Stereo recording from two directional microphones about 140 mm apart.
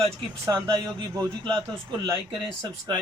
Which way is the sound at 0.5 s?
30° right (ahead or behind).